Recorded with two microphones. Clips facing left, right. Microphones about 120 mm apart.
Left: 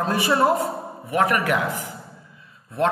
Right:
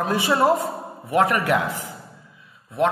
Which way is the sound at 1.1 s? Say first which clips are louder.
Right 1 dB; 35° right (ahead or behind).